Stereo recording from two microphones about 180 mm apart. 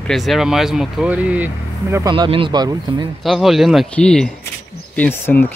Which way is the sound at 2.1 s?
30° right (ahead or behind).